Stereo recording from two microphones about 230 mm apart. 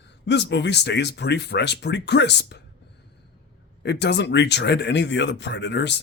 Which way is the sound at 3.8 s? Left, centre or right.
Left.